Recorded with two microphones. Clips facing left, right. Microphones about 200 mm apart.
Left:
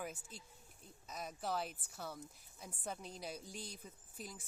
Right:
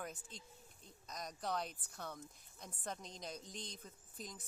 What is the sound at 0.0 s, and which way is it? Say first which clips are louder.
Speech: left 2 dB; 10° left (ahead or behind).